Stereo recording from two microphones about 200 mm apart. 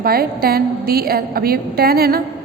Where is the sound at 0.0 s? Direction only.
50° right (ahead or behind).